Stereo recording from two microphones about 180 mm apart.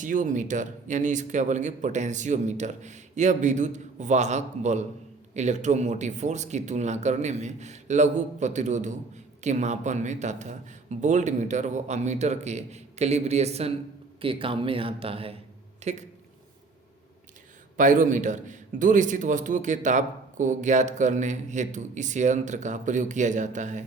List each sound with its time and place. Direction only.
0.0 s a man's voice: 45° right (ahead or behind)
17.7 s a man's voice: 45° right (ahead or behind)